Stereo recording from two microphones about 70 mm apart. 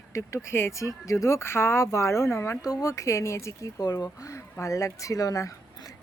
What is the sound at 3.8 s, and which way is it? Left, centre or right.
Speech, left.